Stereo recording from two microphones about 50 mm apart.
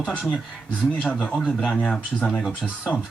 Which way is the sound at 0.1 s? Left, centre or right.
Left.